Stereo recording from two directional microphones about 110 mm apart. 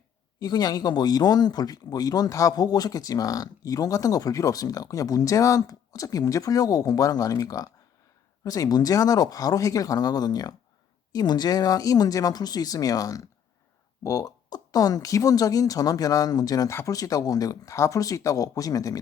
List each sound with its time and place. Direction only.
0.3 s speech: 35° left (ahead or behind)